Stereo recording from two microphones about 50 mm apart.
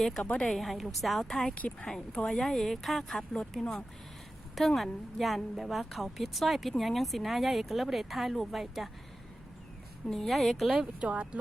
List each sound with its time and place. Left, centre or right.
0.0 s speech: centre
1.5 s speech: left
2.1 s speech: centre
10.1 s speech: centre
11.0 s speech: right